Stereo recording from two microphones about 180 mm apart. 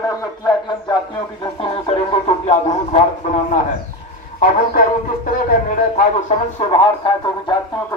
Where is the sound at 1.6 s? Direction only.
35° left (ahead or behind).